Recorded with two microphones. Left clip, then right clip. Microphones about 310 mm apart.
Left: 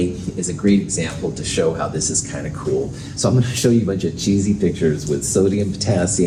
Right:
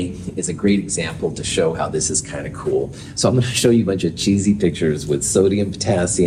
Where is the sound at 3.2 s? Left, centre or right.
Right.